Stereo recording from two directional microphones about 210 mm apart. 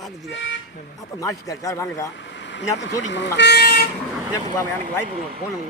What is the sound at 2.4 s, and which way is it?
Speech, 60° left (ahead or behind).